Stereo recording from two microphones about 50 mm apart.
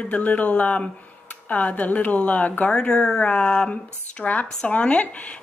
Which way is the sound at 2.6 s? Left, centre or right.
Centre.